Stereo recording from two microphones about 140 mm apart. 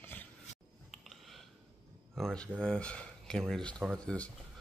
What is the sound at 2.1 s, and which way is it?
Speech, 5° left (ahead or behind).